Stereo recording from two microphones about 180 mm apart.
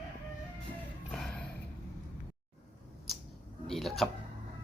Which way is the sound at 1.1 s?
5° left (ahead or behind).